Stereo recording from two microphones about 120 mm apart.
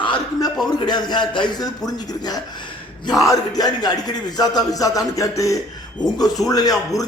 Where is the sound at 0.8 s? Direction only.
35° left (ahead or behind).